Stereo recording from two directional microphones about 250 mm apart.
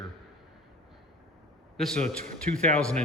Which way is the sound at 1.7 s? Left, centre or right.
Centre.